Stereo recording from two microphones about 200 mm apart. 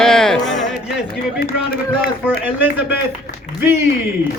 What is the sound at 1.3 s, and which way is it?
Speech, 45° left (ahead or behind).